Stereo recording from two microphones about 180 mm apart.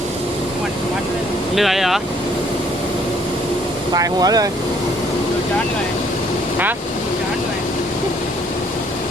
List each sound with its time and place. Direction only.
1.5 s speech: centre (ahead or behind)
3.9 s speech: 20° right (ahead or behind)